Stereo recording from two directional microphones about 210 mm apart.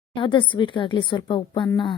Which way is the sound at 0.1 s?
25° left (ahead or behind).